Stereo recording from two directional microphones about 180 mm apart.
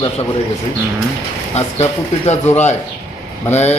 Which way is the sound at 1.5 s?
35° left (ahead or behind).